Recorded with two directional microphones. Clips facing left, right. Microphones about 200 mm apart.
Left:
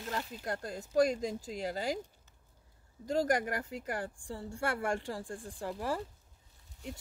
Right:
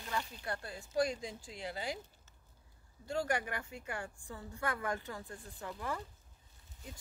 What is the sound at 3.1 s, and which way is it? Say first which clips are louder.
A woman's voice: left 5 dB; 40° left (ahead or behind).